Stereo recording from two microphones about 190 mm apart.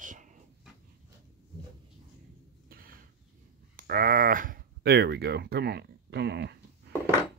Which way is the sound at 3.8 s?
50° right (ahead or behind).